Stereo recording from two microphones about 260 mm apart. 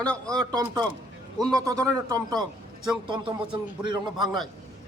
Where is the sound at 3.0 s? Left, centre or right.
Centre.